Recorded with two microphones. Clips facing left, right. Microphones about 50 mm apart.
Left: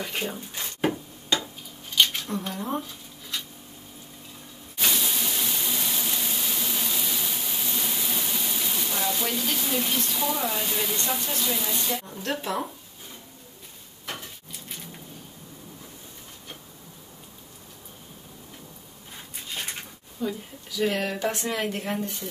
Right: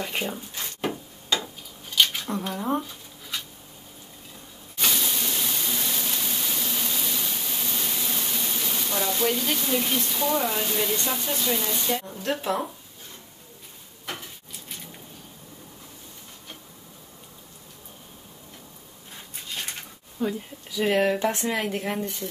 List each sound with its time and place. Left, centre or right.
0.0 s speech: centre
0.6 s a sound: centre
2.2 s speech: centre
4.7 s a sound: centre
11.6 s speech: centre
14.0 s a sound: centre
20.2 s speech: right
21.6 s speech: centre
22.0 s speech: centre